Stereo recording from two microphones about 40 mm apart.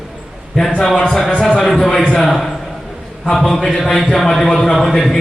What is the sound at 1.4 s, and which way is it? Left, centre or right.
Speech, centre.